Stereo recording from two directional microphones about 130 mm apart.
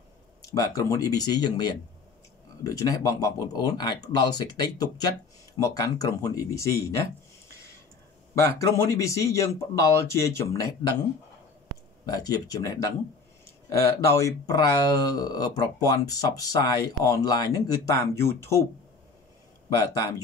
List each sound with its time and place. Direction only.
0.6 s speech: 25° left (ahead or behind)
8.4 s speech: 25° left (ahead or behind)
12.1 s speech: 30° left (ahead or behind)
14.0 s speech: 20° left (ahead or behind)
19.7 s speech: 30° left (ahead or behind)